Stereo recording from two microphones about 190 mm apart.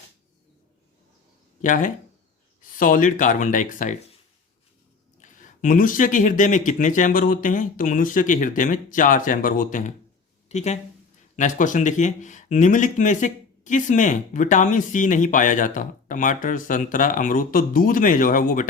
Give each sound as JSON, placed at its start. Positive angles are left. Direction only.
{"t": 1.6, "sound": "speech", "side_deg": 40}
{"t": 5.2, "sound": "speech", "side_deg": 45}